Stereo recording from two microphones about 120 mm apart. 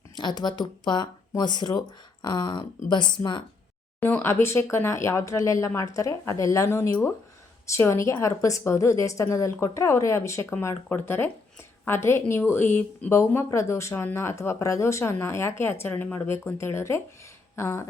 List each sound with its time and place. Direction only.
0.2 s speech: 35° left (ahead or behind)
4.0 s speech: 15° left (ahead or behind)